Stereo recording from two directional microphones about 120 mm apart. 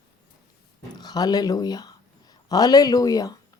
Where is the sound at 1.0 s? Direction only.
35° left (ahead or behind).